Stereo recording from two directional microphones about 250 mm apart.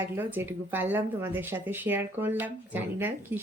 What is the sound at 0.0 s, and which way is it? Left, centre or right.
Speech, centre.